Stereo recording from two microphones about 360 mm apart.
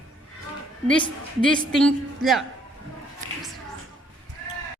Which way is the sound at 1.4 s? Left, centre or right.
Centre.